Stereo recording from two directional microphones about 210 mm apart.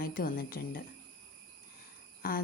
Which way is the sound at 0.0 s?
40° left (ahead or behind).